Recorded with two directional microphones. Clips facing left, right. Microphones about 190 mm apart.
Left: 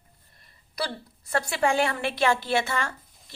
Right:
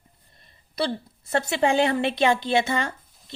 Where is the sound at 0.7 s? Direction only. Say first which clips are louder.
Right 5 dB; 25° right (ahead or behind).